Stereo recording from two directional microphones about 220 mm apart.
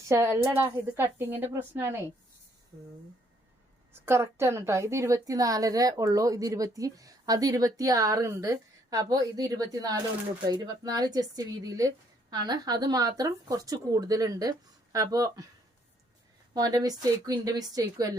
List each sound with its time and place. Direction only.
0.1 s a woman's voice: 10° right (ahead or behind)
4.0 s a woman's voice: 10° right (ahead or behind)
16.6 s a woman's voice: 15° right (ahead or behind)